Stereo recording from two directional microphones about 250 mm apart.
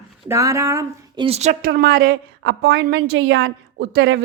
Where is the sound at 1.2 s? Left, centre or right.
Right.